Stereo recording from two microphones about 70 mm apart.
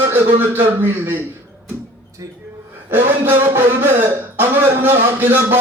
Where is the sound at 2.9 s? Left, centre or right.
Right.